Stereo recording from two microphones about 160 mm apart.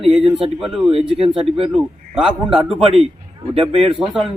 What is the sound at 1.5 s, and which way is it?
Speech, 35° right (ahead or behind).